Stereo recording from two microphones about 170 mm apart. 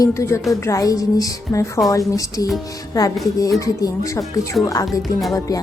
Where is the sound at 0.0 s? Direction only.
20° left (ahead or behind).